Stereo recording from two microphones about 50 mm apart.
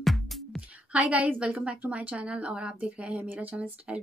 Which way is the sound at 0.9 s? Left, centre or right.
Right.